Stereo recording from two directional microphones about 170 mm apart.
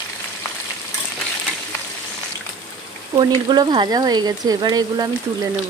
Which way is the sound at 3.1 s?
25° right (ahead or behind).